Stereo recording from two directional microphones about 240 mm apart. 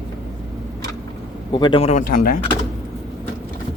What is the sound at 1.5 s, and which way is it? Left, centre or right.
Speech, centre.